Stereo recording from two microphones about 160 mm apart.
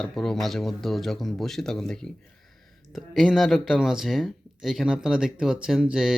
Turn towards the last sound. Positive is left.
turn(degrees=-5)  # may be behind; listen again after turning